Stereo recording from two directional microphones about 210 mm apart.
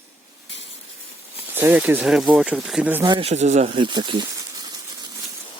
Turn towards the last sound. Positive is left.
turn(degrees=-20)  # may be behind; listen again after turning